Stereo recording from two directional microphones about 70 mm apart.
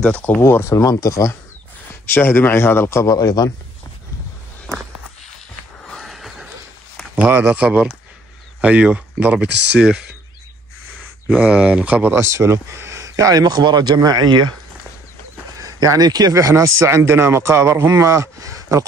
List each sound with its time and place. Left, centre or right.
0.1 s speech: centre
0.4 s speech: left
2.0 s speech: left
3.1 s a man's voice: left
5.9 s a sound: centre
7.2 s speech: right
7.4 s speech: centre
11.2 s speech: centre
12.0 s speech: right
15.6 s speech: right